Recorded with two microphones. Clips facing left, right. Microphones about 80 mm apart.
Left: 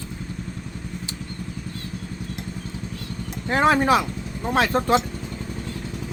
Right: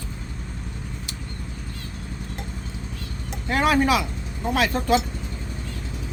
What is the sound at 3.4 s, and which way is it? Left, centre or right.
Speech, left.